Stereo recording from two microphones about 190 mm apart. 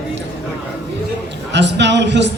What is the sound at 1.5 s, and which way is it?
Speech, 65° right (ahead or behind).